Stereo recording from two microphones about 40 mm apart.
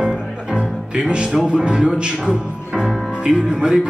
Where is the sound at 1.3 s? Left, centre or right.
Right.